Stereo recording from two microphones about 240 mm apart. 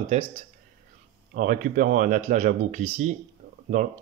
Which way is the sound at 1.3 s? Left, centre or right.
Right.